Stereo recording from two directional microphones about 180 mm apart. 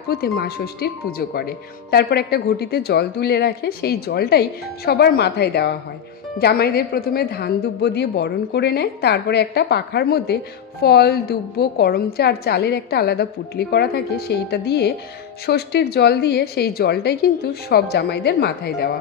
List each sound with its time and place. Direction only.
0.1 s a woman's voice: 60° left (ahead or behind)